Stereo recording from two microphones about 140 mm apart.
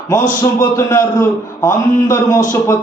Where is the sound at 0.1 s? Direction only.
20° left (ahead or behind).